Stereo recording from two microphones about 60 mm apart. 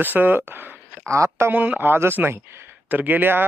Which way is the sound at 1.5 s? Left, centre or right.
Right.